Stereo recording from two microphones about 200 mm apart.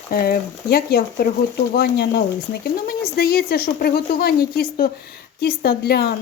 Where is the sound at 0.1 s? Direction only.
50° left (ahead or behind).